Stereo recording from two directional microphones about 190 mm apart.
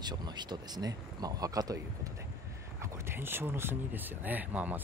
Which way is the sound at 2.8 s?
15° right (ahead or behind).